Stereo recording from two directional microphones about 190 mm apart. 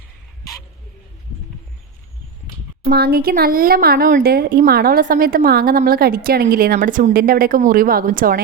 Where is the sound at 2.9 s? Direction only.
55° right (ahead or behind).